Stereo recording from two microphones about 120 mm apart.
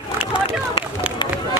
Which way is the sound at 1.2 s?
40° left (ahead or behind).